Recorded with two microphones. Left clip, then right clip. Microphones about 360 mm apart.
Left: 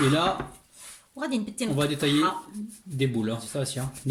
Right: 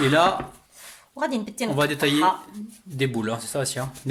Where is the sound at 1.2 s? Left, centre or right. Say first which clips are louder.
Right 4 dB; centre.